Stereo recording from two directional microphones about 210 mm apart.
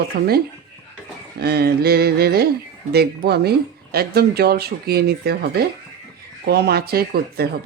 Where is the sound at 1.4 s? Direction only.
50° right (ahead or behind).